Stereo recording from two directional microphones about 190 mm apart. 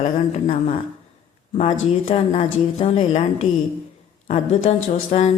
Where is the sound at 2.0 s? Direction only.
30° left (ahead or behind).